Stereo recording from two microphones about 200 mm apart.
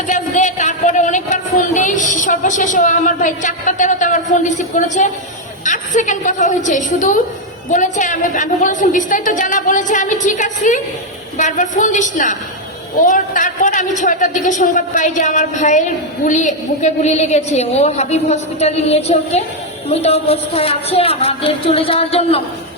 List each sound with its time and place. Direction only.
0.1 s a man's voice: 40° left (ahead or behind)